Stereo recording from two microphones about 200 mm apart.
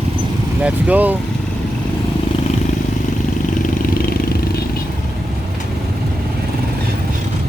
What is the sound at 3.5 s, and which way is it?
Vehicle, 45° left (ahead or behind).